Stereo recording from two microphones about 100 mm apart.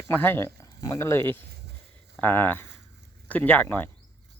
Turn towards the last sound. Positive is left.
turn(degrees=20)  # may be behind; listen again after turning